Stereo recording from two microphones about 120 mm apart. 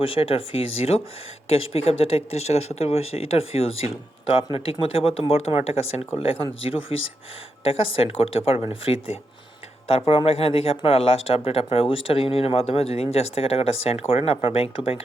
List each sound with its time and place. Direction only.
0.0 s speech: 50° left (ahead or behind)